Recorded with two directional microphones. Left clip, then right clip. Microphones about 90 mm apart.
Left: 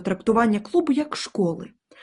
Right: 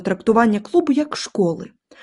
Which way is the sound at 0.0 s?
50° right (ahead or behind).